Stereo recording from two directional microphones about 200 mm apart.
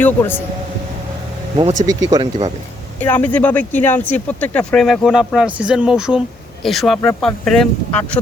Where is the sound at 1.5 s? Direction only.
30° right (ahead or behind).